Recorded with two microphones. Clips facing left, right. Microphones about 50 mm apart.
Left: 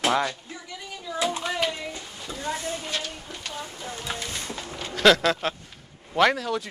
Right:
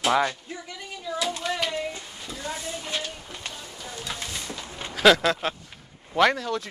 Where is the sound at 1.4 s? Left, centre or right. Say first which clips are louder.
Left 1 dB; centre.